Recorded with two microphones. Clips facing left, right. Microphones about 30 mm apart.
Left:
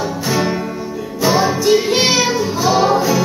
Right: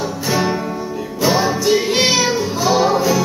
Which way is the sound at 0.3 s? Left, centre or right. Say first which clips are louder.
Right 1 dB; centre.